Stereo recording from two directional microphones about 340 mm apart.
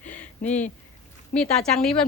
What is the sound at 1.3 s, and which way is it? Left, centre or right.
Speech, centre.